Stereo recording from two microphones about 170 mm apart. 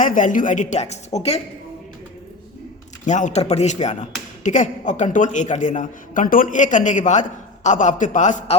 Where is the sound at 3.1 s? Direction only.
45° left (ahead or behind).